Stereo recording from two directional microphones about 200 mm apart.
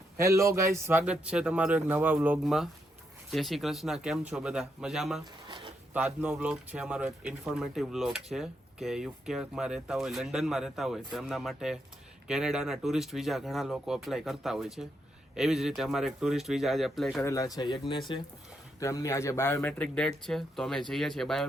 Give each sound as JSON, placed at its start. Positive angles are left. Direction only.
{"t": 0.2, "sound": "speech", "side_deg": -15}
{"t": 17.2, "sound": "speech", "side_deg": 15}